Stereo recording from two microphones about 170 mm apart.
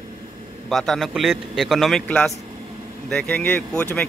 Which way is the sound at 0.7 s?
Centre (ahead or behind).